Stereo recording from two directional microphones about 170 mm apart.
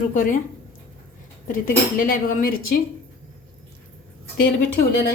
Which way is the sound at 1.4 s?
55° left (ahead or behind).